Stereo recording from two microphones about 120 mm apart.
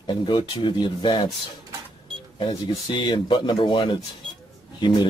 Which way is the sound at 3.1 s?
40° left (ahead or behind).